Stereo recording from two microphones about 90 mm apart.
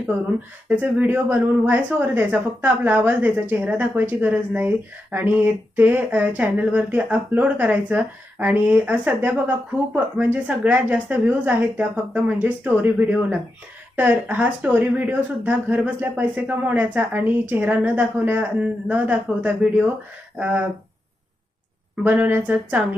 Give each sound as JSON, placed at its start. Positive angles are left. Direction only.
{"t": 0.7, "sound": "speech", "side_deg": -20}
{"t": 10.3, "sound": "speech", "side_deg": -15}
{"t": 22.0, "sound": "speech", "side_deg": -20}